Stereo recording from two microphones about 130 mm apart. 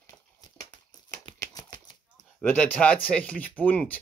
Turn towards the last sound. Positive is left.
turn(degrees=10)  # may be behind; listen again after turning